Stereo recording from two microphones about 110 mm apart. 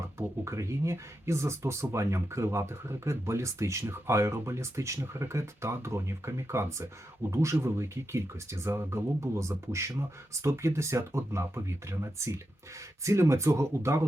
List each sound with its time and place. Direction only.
0.2 s speech: 25° right (ahead or behind)